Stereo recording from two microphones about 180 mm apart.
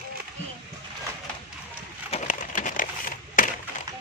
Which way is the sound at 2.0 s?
40° left (ahead or behind).